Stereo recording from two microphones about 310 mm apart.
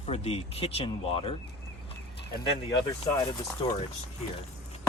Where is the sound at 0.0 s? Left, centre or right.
Centre.